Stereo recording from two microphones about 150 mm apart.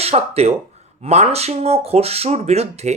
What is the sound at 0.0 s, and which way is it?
Speech, 45° right (ahead or behind).